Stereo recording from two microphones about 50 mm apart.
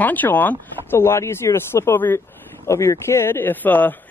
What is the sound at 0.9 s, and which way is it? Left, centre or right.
Speech, left.